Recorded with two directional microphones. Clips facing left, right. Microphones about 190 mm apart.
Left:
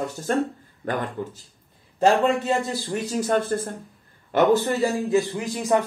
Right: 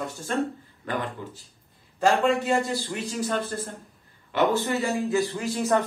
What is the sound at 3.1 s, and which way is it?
Speech, 45° left (ahead or behind).